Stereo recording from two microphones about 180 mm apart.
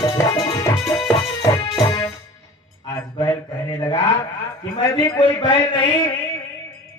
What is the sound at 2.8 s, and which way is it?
Mantra, 20° left (ahead or behind).